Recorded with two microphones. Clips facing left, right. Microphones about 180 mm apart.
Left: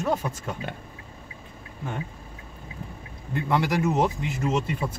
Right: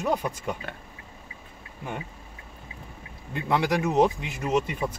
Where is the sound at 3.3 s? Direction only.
20° right (ahead or behind).